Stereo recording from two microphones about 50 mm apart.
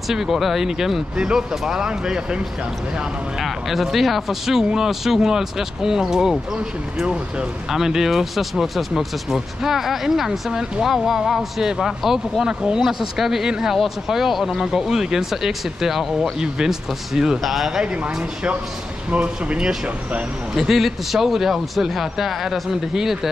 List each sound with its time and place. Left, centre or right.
0.1 s speech: centre
3.3 s speech: centre
18.0 s speech: right
20.5 s speech: centre